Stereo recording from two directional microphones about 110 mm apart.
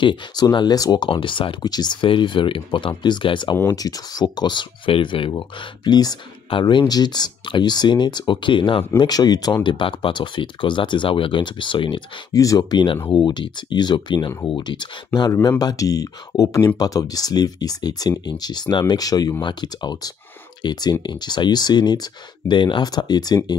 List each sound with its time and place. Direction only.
0.0 s speech: 45° left (ahead or behind)
1.0 s speech: 50° left (ahead or behind)
3.5 s speech: 30° left (ahead or behind); by 5.3 s 50° left (ahead or behind)
5.3 s speech: 40° left (ahead or behind)
12.3 s speech: 30° left (ahead or behind)
15.6 s speech: 30° left (ahead or behind)